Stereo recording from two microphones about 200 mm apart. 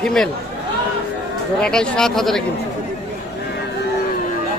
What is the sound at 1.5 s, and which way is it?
Speech, 5° left (ahead or behind).